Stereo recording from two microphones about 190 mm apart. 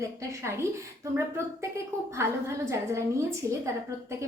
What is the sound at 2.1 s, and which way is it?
Speech, 15° right (ahead or behind).